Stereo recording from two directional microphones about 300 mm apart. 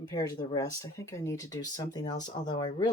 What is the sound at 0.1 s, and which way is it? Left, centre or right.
Speech, centre.